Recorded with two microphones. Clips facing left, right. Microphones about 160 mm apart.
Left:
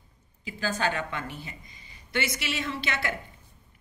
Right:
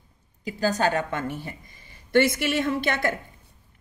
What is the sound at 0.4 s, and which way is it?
A woman's voice, 40° right (ahead or behind).